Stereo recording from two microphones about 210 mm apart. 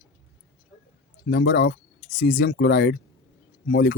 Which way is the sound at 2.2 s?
40° left (ahead or behind).